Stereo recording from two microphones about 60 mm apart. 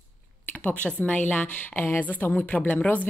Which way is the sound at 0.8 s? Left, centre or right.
Left.